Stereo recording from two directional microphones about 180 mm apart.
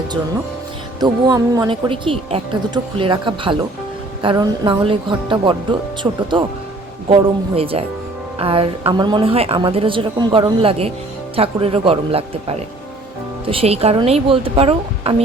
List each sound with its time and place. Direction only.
0.9 s speech: 20° right (ahead or behind)
6.0 s speech: 15° right (ahead or behind)
7.1 s a woman's voice: 30° right (ahead or behind)